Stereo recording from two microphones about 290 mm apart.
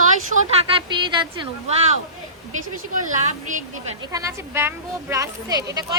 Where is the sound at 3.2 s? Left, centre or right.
Right.